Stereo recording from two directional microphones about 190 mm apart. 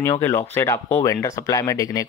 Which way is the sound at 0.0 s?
15° left (ahead or behind).